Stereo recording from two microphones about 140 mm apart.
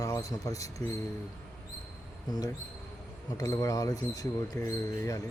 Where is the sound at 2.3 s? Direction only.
30° left (ahead or behind).